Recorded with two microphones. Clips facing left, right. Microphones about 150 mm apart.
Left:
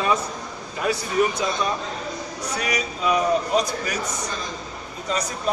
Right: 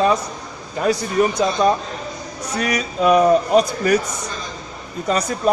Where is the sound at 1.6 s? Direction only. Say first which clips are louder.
Right 11 dB; 35° right (ahead or behind).